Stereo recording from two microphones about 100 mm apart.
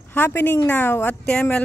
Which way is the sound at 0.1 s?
20° left (ahead or behind).